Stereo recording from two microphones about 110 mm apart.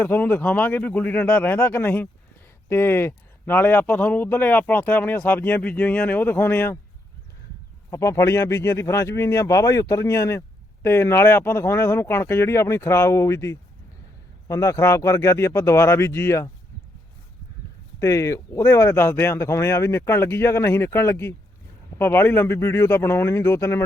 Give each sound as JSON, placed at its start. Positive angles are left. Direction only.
{"t": 0.0, "sound": "a man's voice", "side_deg": 15}
{"t": 7.9, "sound": "speech", "side_deg": 25}
{"t": 18.0, "sound": "speech", "side_deg": 25}